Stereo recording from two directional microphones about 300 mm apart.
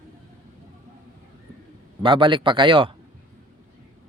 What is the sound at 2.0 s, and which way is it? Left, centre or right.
Speech, centre.